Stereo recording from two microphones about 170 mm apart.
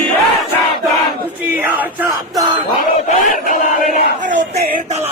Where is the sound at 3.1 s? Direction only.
45° left (ahead or behind).